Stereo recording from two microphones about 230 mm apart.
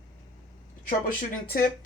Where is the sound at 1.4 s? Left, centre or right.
Left.